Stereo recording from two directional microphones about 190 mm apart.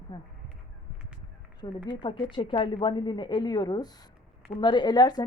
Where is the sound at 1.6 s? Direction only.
25° left (ahead or behind).